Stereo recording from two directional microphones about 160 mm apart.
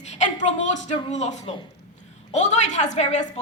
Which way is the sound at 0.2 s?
50° left (ahead or behind).